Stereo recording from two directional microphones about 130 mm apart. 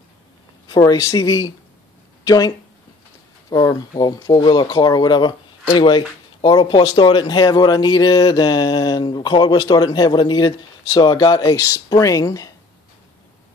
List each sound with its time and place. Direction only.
0.7 s speech: 30° left (ahead or behind)